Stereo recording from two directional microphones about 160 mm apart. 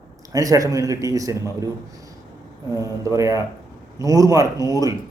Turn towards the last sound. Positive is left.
turn(degrees=-20)  # may be behind; listen again after turning